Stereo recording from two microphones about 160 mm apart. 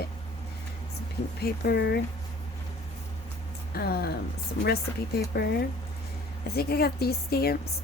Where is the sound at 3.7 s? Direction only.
75° left (ahead or behind).